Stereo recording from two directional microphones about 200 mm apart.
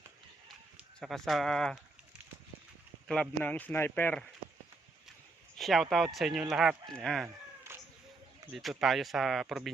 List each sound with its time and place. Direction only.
0.9 s speech: centre (ahead or behind)
3.1 s speech: 5° left (ahead or behind)
5.5 s speech: centre (ahead or behind)
8.5 s speech: centre (ahead or behind)